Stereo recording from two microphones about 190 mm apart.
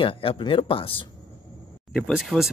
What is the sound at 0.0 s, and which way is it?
Speech, 30° left (ahead or behind).